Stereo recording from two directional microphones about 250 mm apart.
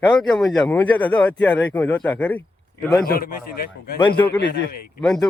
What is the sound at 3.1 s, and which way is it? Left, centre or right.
A man's voice, left.